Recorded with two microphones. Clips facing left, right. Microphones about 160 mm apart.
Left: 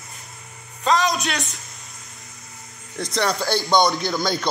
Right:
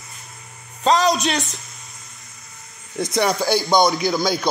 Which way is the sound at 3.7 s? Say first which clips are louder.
Right 1 dB; 5° right (ahead or behind).